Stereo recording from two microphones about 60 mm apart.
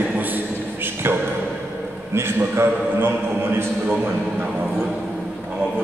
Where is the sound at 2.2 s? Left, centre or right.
Right.